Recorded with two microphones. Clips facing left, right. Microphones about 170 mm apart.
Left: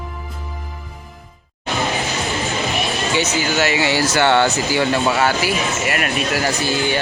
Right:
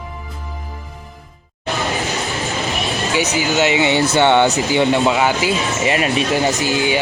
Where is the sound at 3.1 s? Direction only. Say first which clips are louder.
Right 2 dB; 15° right (ahead or behind).